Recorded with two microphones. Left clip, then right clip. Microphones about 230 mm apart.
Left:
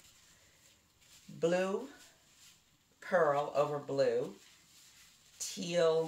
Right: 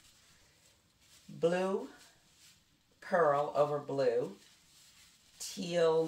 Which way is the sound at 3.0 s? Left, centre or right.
Centre.